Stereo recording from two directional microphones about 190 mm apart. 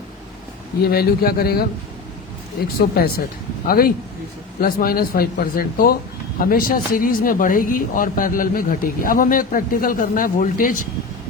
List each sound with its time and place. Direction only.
0.8 s speech: 55° left (ahead or behind)